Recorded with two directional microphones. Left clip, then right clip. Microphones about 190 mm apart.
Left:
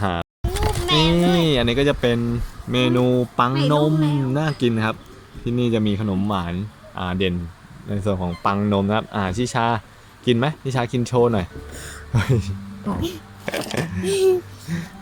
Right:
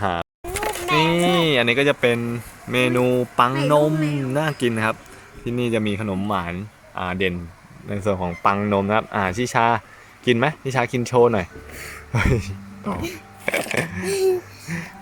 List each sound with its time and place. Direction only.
0.0 s speech: centre (ahead or behind)
3.5 s speech: 15° right (ahead or behind)
3.8 s speech: centre (ahead or behind)